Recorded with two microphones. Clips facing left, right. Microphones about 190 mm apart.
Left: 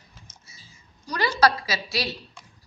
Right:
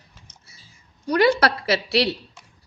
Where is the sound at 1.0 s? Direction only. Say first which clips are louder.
Right 4 dB; 60° right (ahead or behind).